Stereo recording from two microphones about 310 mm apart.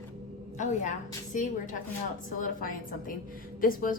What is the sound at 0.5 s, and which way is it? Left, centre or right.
A woman's voice, left.